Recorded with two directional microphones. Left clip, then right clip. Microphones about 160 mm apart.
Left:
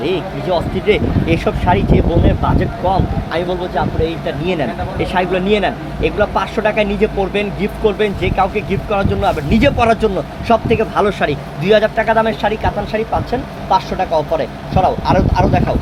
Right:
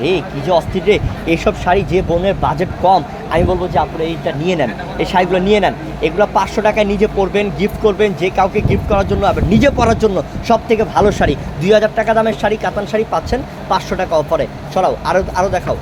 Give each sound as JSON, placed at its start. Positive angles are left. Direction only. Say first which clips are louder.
{"t": 0.0, "sound": "speech", "louder": "right 2 dB", "side_deg": -50}
{"t": 13.3, "sound": "speech", "louder": "left 1 dB", "side_deg": -45}